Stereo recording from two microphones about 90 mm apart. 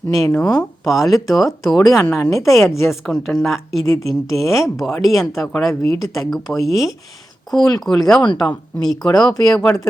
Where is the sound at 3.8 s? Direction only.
35° left (ahead or behind).